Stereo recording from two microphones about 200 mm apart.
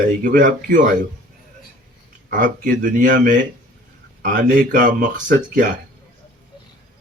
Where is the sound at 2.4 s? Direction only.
40° right (ahead or behind).